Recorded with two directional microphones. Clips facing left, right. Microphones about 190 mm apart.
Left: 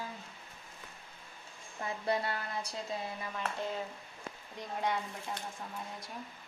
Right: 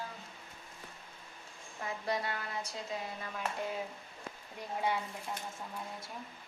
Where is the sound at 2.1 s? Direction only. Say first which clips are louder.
Left 3 dB; 35° left (ahead or behind).